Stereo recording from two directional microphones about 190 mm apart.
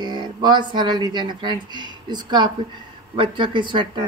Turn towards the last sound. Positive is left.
turn(degrees=-25)  # may be behind; listen again after turning